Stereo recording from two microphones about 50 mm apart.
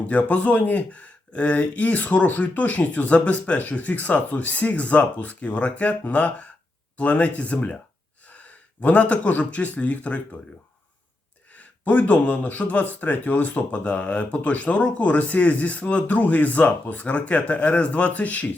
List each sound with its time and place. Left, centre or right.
0.1 s speech: left
11.5 s speech: left